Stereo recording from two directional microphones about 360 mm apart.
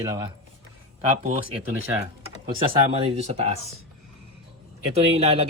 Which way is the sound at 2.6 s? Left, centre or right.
Centre.